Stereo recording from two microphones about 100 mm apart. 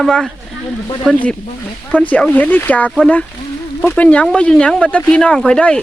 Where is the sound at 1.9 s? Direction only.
15° left (ahead or behind).